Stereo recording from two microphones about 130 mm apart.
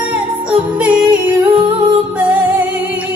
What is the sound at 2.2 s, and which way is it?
Music, 10° right (ahead or behind).